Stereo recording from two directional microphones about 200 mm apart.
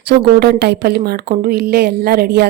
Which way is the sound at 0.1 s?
55° right (ahead or behind).